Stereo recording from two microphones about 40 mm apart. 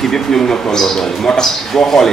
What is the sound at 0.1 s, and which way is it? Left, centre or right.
A man's voice, centre.